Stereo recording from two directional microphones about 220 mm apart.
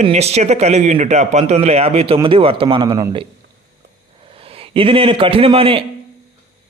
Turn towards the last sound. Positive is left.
turn(degrees=-25)  # may be behind; listen again after turning